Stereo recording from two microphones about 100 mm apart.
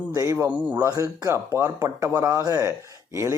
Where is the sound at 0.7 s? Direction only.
35° right (ahead or behind).